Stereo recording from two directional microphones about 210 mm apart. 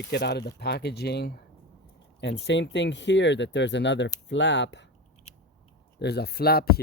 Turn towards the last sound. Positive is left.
turn(degrees=45)  # may be behind; listen again after turning